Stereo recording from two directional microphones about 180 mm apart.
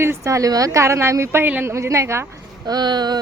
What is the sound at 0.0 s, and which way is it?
A woman's voice, 15° right (ahead or behind).